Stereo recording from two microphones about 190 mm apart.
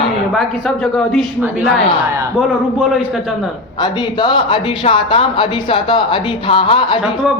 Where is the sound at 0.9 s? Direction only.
Centre (ahead or behind).